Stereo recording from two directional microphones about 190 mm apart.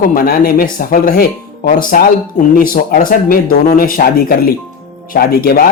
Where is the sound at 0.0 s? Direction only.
50° left (ahead or behind).